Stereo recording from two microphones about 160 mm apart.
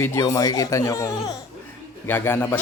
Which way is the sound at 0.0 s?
20° left (ahead or behind).